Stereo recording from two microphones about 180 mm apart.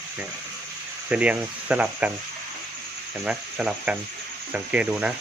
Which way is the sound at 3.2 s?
5° right (ahead or behind).